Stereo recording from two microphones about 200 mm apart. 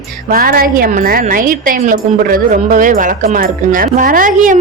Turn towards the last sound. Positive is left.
turn(degrees=-40)  # may be behind; listen again after turning